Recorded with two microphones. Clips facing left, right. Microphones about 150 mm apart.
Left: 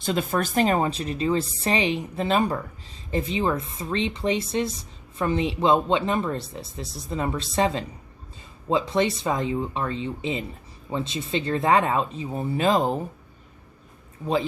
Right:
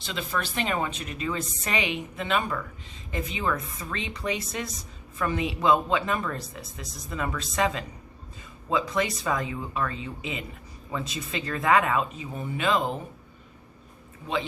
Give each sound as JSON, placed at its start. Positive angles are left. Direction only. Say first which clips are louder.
{"t": 0.0, "sound": "speech", "louder": "left 7 dB", "side_deg": 45}